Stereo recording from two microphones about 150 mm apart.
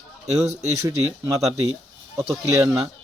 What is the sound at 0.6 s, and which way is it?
Speech, 20° right (ahead or behind).